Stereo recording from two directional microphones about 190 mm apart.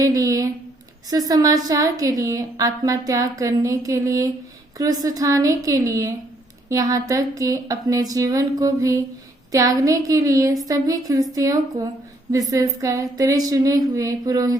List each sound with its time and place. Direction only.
0.0 s a woman's voice: 20° right (ahead or behind)